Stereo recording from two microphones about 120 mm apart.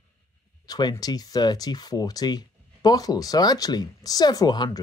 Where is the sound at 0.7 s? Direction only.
35° left (ahead or behind).